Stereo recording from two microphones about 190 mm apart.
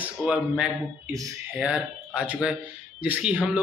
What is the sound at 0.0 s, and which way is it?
Speech, 5° right (ahead or behind).